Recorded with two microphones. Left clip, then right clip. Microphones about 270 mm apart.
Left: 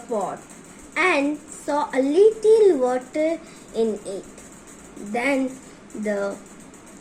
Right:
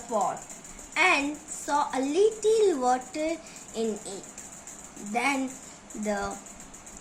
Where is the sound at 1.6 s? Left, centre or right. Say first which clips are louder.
Left 5 dB; centre.